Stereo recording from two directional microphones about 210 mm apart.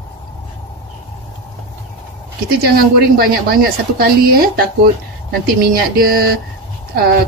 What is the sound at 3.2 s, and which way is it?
Speech, 45° right (ahead or behind).